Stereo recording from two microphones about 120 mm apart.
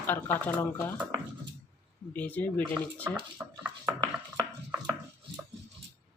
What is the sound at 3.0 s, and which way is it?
Speech, 10° right (ahead or behind).